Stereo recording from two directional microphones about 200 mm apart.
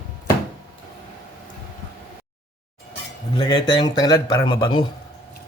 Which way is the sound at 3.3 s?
20° left (ahead or behind).